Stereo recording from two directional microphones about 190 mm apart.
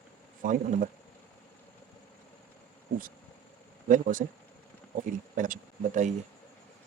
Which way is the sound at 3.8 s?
45° right (ahead or behind).